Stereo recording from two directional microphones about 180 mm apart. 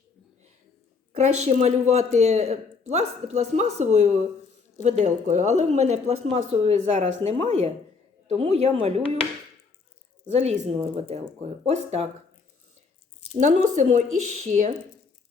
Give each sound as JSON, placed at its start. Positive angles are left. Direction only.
{"t": 1.1, "sound": "speech", "side_deg": -40}
{"t": 10.2, "sound": "speech", "side_deg": -40}
{"t": 13.3, "sound": "speech", "side_deg": -40}